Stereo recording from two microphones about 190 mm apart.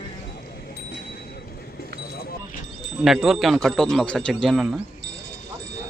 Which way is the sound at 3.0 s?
Centre (ahead or behind).